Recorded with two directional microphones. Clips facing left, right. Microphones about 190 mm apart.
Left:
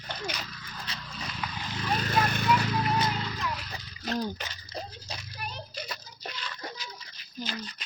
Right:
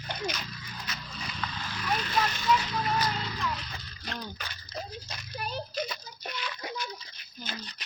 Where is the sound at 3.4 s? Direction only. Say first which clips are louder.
Even; centre (ahead or behind).